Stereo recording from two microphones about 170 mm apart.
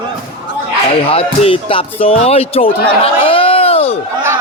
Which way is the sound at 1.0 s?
35° left (ahead or behind).